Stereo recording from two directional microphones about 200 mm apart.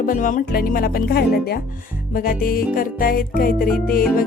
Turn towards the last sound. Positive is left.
turn(degrees=45)  # may be behind; listen again after turning